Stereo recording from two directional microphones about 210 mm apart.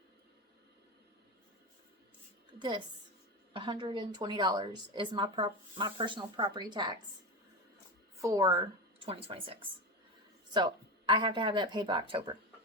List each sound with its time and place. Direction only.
2.6 s a woman's voice: 20° right (ahead or behind)
8.2 s a woman's voice: 15° right (ahead or behind)